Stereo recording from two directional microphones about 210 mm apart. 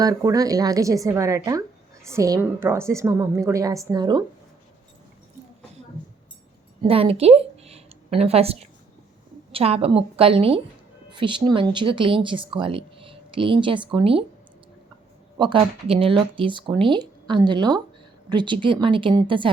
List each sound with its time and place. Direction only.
0.0 s a woman's voice: 15° right (ahead or behind)
6.8 s a woman's voice: 25° right (ahead or behind)
15.4 s speech: 25° right (ahead or behind)